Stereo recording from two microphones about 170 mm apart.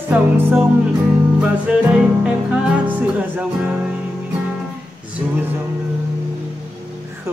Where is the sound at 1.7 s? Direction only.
5° right (ahead or behind).